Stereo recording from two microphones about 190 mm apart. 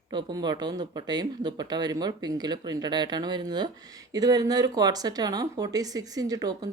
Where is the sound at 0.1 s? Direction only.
25° right (ahead or behind).